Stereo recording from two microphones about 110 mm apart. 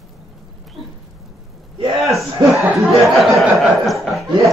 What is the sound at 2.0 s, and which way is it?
Speech, centre (ahead or behind).